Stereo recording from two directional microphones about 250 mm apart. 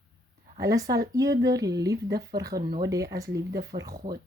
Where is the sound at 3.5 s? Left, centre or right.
Right.